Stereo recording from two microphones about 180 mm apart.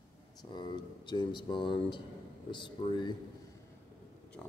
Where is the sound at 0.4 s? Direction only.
25° left (ahead or behind).